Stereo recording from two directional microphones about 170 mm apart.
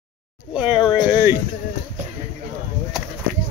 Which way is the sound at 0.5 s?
5° right (ahead or behind).